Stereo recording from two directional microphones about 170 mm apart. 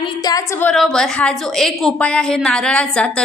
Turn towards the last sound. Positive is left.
turn(degrees=5)  # may be behind; listen again after turning